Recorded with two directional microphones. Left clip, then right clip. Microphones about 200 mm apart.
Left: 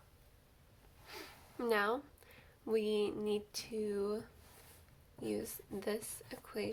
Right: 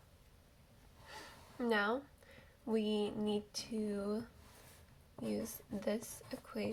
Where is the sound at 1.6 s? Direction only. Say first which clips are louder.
Left 1 dB; 40° left (ahead or behind).